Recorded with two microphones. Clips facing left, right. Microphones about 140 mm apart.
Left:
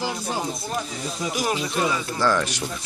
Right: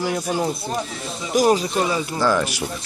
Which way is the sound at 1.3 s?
40° right (ahead or behind).